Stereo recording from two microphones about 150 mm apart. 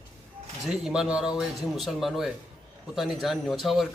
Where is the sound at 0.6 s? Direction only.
5° right (ahead or behind).